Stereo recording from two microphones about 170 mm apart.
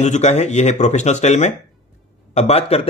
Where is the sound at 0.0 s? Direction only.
45° left (ahead or behind).